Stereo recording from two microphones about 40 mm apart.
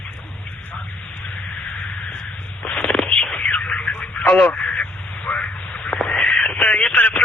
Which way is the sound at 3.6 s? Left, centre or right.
Left.